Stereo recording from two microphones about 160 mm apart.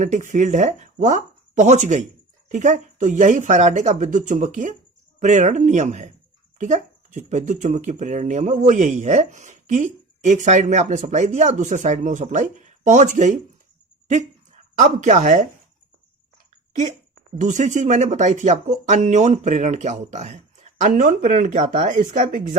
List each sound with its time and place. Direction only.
0.0 s speech: 50° right (ahead or behind)
17.3 s speech: 50° right (ahead or behind)
20.8 s speech: 60° right (ahead or behind)